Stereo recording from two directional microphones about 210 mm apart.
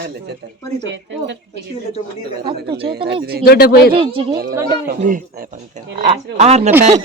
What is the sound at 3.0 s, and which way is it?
Speech, 50° right (ahead or behind).